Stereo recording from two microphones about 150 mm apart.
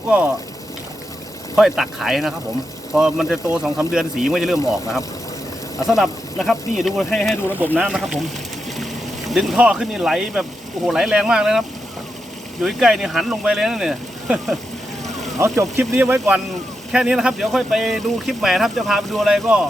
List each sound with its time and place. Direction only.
1.5 s speech: 5° right (ahead or behind)
7.6 s speech: 10° right (ahead or behind)
9.3 s speech: centre (ahead or behind)
12.6 s speech: 5° right (ahead or behind)
15.4 s speech: 20° right (ahead or behind)